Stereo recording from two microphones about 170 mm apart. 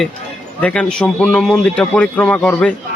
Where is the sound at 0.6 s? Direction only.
5° left (ahead or behind).